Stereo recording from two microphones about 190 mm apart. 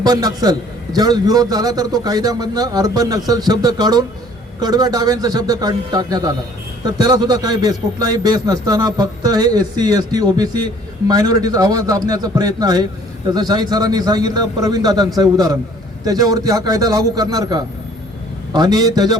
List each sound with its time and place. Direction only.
0.0 s a man's voice: 20° right (ahead or behind)